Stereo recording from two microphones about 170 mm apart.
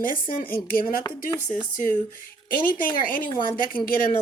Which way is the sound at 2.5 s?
55° left (ahead or behind).